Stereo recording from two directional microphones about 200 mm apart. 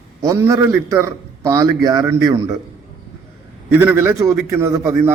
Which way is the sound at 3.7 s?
10° right (ahead or behind).